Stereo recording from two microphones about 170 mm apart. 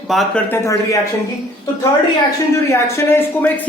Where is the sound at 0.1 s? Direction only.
Centre (ahead or behind).